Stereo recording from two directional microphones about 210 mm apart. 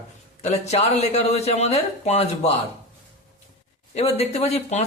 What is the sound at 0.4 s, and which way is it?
A man's voice, 30° left (ahead or behind).